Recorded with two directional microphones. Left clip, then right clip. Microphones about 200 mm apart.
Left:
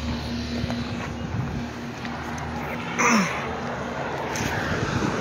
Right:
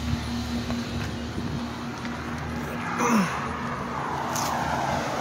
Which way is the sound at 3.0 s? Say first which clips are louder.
Left 4 dB; 20° right (ahead or behind).